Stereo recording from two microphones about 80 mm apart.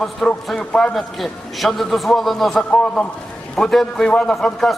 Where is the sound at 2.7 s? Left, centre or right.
Centre.